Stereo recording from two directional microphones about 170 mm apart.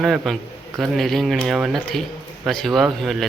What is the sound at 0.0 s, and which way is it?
Speech, centre (ahead or behind).